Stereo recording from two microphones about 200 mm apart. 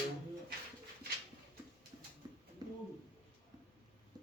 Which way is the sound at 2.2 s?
20° right (ahead or behind).